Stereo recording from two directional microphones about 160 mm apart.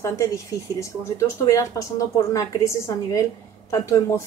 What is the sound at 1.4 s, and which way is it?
A woman's voice, 20° left (ahead or behind).